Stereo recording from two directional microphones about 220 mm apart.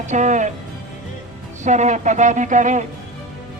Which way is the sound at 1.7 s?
35° right (ahead or behind).